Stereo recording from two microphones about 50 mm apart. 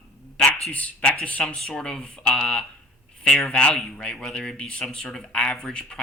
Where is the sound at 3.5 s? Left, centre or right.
Left.